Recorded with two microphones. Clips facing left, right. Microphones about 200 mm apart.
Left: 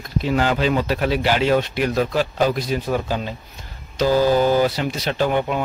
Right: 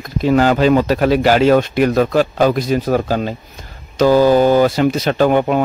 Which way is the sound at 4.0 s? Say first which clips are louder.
Right 6 dB; 55° right (ahead or behind).